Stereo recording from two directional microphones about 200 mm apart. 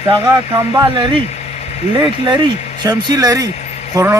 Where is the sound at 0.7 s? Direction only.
20° right (ahead or behind).